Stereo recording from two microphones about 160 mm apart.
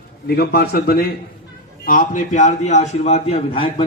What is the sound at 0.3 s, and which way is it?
Speech, 80° left.